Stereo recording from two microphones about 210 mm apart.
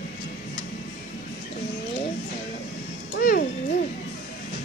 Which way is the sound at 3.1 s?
45° left (ahead or behind).